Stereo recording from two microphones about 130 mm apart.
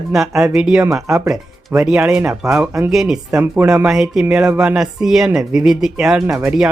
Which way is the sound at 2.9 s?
5° right (ahead or behind).